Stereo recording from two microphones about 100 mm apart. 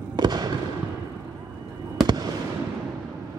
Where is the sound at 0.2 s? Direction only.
45° right (ahead or behind).